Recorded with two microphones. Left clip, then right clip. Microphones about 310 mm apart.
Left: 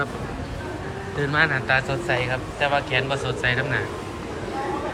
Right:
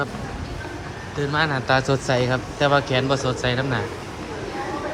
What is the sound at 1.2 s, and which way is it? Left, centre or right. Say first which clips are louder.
Speech: left 1 dB; centre.